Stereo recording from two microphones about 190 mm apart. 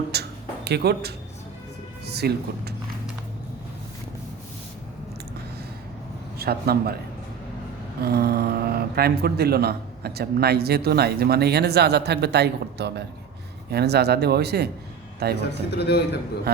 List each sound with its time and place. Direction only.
0.1 s speech: 60° right (ahead or behind)
6.4 s speech: 55° right (ahead or behind)
8.0 s speech: 55° right (ahead or behind)
15.4 s a man's voice: 60° left (ahead or behind)